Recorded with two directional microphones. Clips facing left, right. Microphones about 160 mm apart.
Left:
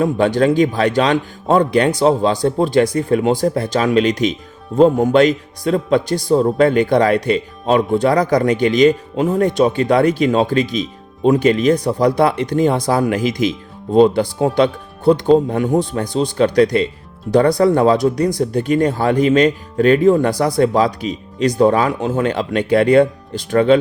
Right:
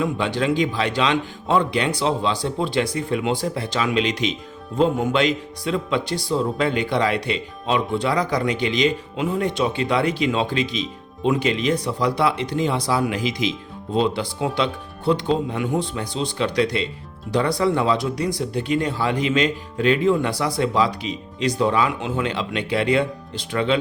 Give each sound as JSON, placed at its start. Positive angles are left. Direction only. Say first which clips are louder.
{"t": 0.0, "sound": "speech", "louder": "left 8 dB", "side_deg": 45}